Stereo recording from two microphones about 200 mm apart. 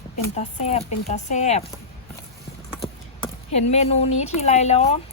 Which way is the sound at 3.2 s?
35° left (ahead or behind).